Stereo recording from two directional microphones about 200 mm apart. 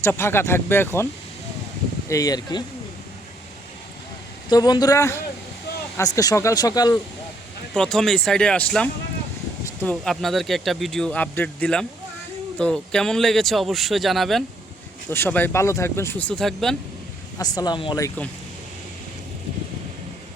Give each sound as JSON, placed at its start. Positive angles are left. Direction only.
{"t": 0.0, "sound": "speech", "side_deg": 10}
{"t": 2.0, "sound": "speech", "side_deg": 15}
{"t": 4.4, "sound": "speech", "side_deg": 20}
{"t": 7.7, "sound": "speech", "side_deg": 5}
{"t": 9.9, "sound": "speech", "side_deg": 0}
{"t": 15.1, "sound": "speech", "side_deg": 10}
{"t": 17.3, "sound": "speech", "side_deg": 20}